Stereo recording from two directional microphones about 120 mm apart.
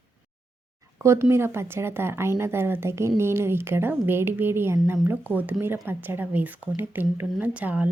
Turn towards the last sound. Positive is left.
turn(degrees=-10)  # may be behind; listen again after turning